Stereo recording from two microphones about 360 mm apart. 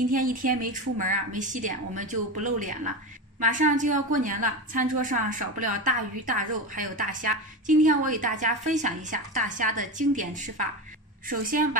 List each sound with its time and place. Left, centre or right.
0.1 s a woman's voice: right